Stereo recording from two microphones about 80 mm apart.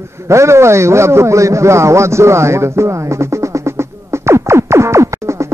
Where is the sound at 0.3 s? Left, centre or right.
Right.